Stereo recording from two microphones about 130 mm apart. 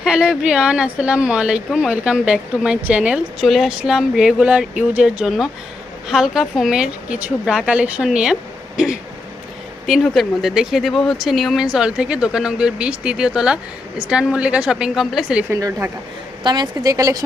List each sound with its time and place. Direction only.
0.0 s speech: 5° right (ahead or behind)
15.4 s a woman's voice: 20° right (ahead or behind)
16.4 s a woman's voice: 35° right (ahead or behind)